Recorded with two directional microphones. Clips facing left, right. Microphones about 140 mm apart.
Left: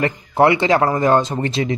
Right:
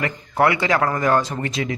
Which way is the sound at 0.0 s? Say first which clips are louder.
Left 4 dB; 25° left (ahead or behind).